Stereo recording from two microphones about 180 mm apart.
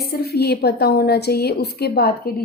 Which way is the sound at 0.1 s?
60° left (ahead or behind).